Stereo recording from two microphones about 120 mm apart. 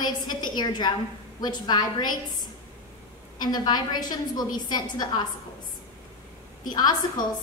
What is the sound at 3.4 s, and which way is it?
A woman's voice, 35° left (ahead or behind).